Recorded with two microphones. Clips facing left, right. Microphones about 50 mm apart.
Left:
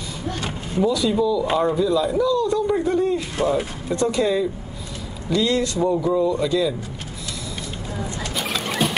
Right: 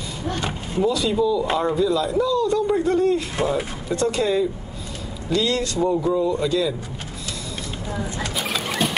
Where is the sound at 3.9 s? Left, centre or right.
Centre.